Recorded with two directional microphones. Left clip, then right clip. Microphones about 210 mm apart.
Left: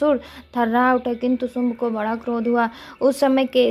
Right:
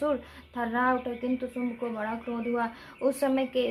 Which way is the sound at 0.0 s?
40° left (ahead or behind).